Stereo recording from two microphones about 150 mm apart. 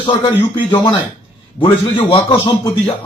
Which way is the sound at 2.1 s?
30° left (ahead or behind).